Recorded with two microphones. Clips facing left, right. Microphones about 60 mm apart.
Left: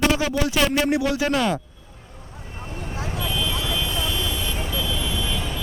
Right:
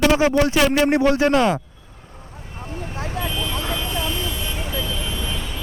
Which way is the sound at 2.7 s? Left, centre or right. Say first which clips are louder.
Right 1 dB; right.